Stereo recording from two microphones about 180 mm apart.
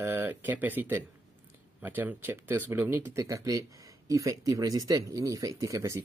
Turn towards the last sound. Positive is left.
turn(degrees=-20)  # may be behind; listen again after turning